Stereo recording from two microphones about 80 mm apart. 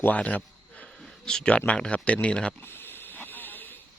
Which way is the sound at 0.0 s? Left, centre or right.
Centre.